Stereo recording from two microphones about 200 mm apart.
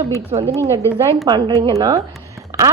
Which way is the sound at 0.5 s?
15° right (ahead or behind).